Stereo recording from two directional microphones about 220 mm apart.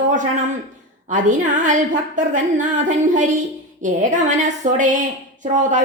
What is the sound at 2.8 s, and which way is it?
A woman's voice, 35° right (ahead or behind).